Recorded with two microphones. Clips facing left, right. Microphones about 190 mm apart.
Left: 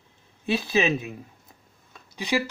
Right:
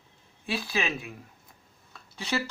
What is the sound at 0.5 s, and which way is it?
Speech, 25° left (ahead or behind).